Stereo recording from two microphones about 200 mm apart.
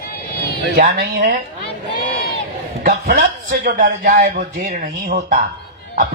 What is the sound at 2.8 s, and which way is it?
Speech, 45° right (ahead or behind).